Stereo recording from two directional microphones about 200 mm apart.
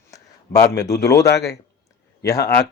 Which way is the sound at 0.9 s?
15° left (ahead or behind).